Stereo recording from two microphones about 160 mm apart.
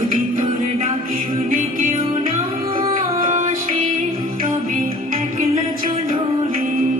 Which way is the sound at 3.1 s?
55° right (ahead or behind).